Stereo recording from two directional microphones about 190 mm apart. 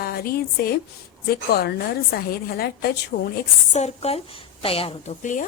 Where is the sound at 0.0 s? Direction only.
50° left (ahead or behind).